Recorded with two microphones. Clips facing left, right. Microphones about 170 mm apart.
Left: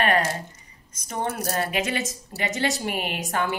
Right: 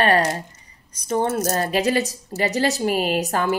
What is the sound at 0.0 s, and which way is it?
A woman's voice, 35° right (ahead or behind).